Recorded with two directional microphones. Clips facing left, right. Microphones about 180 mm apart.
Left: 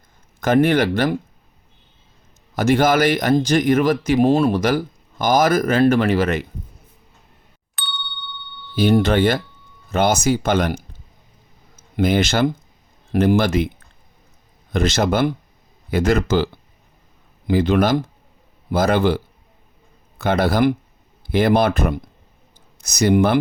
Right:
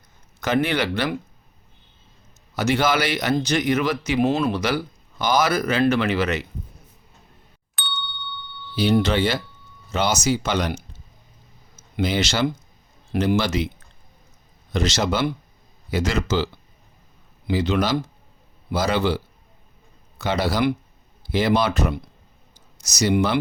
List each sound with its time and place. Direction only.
0.4 s speech: 50° left (ahead or behind)
2.6 s speech: 50° left (ahead or behind)
7.8 s ding: centre (ahead or behind)
8.7 s speech: 50° left (ahead or behind)
11.9 s speech: 55° left (ahead or behind)